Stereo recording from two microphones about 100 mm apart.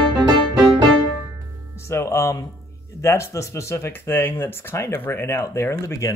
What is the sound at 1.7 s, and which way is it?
Music, 25° left (ahead or behind).